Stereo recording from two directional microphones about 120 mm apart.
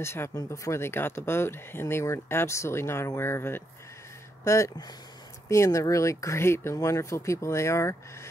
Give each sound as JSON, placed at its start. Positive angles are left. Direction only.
{"t": 0.0, "sound": "speech", "side_deg": 20}